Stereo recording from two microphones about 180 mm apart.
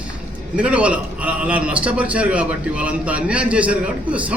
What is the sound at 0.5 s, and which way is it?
A man's voice, 5° right (ahead or behind).